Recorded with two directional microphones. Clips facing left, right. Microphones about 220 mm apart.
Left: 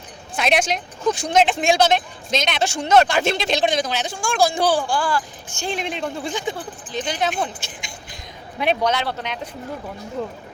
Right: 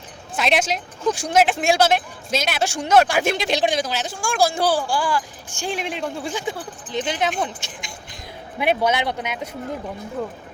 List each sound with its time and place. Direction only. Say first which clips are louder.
0.3 s speech: left 1 dB; centre (ahead or behind)
6.9 s speech: right 1 dB; 20° right (ahead or behind)
8.5 s speech: right 1 dB; 10° right (ahead or behind)